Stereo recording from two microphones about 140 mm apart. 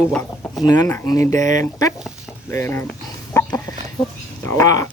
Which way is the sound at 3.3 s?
20° left (ahead or behind).